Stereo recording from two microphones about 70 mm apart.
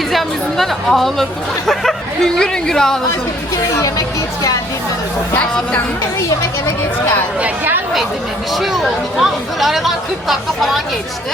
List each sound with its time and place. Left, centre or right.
0.1 s speech: centre
3.8 s speech: left
5.4 s speech: centre
6.1 s speech: left
7.4 s speech: right
8.5 s speech: centre